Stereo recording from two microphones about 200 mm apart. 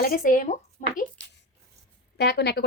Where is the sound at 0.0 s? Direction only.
45° left (ahead or behind).